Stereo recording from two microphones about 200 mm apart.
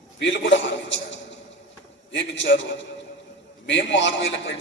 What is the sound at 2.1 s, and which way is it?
A man's voice, 65° left (ahead or behind).